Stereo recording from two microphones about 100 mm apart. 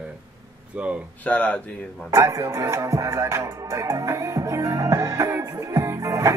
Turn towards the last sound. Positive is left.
turn(degrees=-30)  # may be behind; listen again after turning